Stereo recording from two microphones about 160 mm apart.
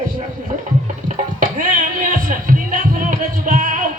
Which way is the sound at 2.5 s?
55° right (ahead or behind).